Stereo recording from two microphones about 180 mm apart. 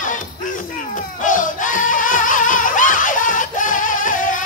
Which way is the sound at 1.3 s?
45° left (ahead or behind).